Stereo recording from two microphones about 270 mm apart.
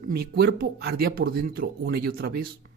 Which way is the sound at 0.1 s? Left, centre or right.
Right.